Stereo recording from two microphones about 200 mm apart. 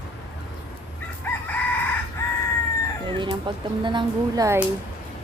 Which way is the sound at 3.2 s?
25° right (ahead or behind).